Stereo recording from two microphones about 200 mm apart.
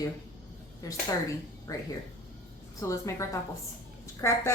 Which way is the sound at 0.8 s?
15° left (ahead or behind).